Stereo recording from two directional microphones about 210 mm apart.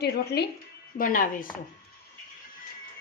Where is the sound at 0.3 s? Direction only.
50° left (ahead or behind).